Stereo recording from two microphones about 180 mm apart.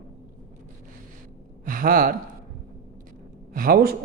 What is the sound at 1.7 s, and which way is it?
Speech, 50° right (ahead or behind).